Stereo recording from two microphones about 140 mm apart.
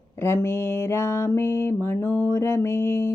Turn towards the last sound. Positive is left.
turn(degrees=15)  # may be behind; listen again after turning